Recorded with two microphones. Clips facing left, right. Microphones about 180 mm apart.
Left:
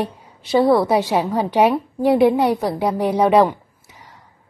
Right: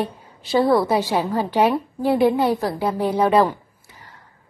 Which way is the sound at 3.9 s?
Centre (ahead or behind).